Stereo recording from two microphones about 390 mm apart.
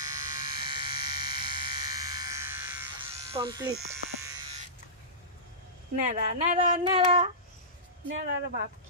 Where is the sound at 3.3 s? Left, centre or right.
Centre.